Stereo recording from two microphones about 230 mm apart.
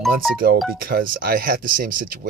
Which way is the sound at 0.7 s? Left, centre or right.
Right.